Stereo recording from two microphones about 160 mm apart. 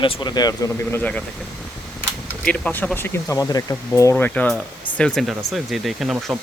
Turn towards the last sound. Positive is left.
turn(degrees=0)  # may be behind; listen again after turning